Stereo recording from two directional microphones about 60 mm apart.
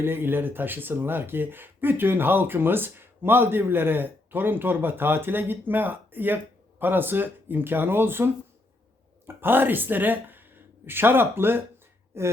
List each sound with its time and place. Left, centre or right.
0.0 s speech: right